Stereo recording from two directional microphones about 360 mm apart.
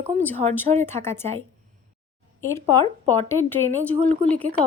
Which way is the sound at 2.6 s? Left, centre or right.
Centre.